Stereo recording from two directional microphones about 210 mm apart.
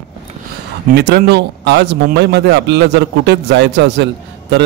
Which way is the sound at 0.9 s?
50° right (ahead or behind).